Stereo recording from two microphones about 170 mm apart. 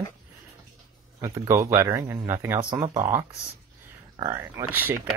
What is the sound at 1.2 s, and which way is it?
Speech, 20° right (ahead or behind).